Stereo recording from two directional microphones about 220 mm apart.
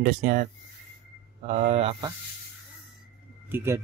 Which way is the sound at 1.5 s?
30° right (ahead or behind).